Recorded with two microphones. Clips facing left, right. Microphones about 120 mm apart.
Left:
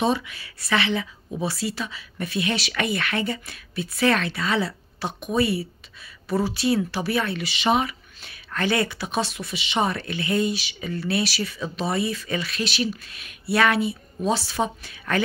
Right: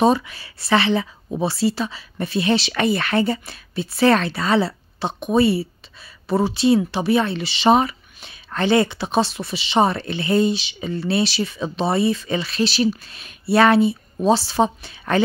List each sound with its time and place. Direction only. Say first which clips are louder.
0.0 s speech: right 6 dB; 40° right (ahead or behind)